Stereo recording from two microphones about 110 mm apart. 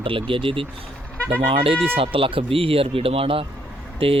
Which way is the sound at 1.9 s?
55° right (ahead or behind).